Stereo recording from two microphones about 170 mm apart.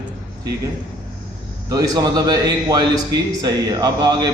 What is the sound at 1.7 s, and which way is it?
A man's voice, 20° right (ahead or behind).